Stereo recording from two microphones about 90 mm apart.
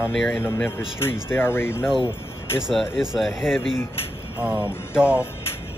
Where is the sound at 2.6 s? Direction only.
5° right (ahead or behind).